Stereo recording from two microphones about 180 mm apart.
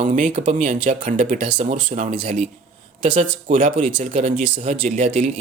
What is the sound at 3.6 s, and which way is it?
Speech, 45° right (ahead or behind).